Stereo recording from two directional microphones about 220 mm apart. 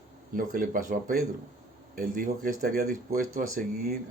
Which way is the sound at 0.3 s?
40° right (ahead or behind).